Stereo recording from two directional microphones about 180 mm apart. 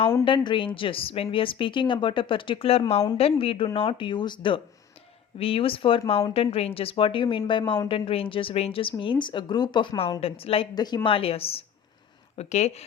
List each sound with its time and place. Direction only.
0.3 s speech: 25° left (ahead or behind)